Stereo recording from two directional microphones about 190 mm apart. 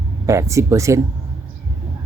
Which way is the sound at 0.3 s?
15° right (ahead or behind).